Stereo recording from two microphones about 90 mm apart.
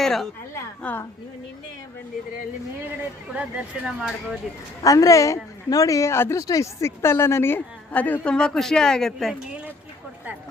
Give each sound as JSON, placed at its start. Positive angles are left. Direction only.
{"t": 0.0, "sound": "a woman's voice", "side_deg": 5}
{"t": 0.8, "sound": "a woman's voice", "side_deg": 20}
{"t": 3.8, "sound": "speech", "side_deg": -5}
{"t": 4.8, "sound": "a woman's voice", "side_deg": 40}